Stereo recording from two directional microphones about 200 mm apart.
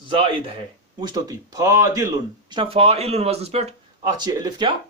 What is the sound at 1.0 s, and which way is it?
Speech, 20° right (ahead or behind).